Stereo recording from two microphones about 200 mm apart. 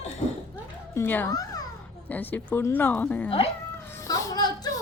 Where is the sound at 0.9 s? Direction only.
10° left (ahead or behind).